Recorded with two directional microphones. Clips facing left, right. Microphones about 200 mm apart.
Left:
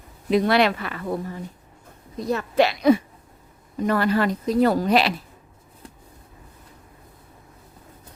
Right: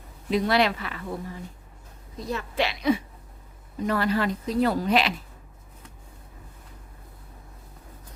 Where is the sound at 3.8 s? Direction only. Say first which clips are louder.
Left 4 dB; 55° left (ahead or behind); by 5.1 s 40° left (ahead or behind).